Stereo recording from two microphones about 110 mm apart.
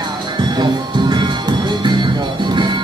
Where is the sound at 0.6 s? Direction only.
45° right (ahead or behind).